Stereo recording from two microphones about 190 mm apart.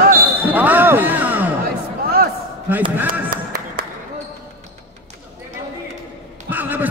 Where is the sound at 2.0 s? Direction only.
55° right (ahead or behind).